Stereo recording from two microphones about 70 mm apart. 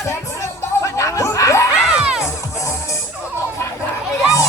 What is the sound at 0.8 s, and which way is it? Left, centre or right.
Snicker, left.